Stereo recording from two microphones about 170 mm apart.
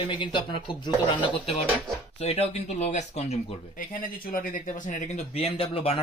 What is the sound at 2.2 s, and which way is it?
Speech, 35° left (ahead or behind).